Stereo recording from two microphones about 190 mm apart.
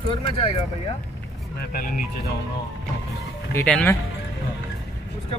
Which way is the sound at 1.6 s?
50° left (ahead or behind).